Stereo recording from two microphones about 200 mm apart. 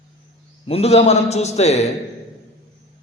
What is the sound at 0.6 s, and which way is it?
A man's voice, 30° left (ahead or behind).